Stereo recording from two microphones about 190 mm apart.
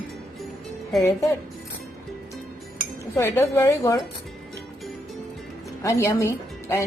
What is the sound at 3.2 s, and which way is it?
Speech, 15° left (ahead or behind).